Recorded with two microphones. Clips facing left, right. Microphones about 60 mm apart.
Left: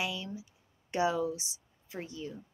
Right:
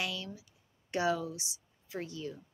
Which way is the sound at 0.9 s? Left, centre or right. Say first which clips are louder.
Left 2 dB; left.